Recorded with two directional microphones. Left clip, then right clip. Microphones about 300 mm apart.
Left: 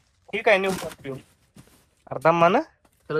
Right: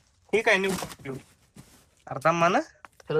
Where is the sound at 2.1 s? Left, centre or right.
Centre.